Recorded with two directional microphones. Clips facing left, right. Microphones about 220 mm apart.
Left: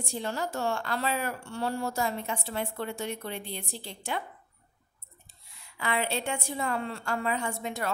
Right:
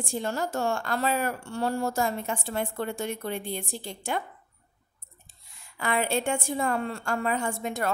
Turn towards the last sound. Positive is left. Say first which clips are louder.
# right 3 dB
turn(degrees=-50)  # may be behind; listen again after turning